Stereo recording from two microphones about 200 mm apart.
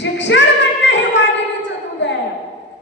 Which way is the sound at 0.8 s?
60° left (ahead or behind).